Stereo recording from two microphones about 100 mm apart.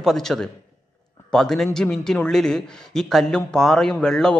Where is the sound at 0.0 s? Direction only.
5° left (ahead or behind).